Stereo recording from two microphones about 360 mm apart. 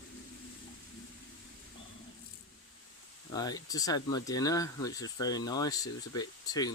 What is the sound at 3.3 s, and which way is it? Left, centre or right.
Speech, centre.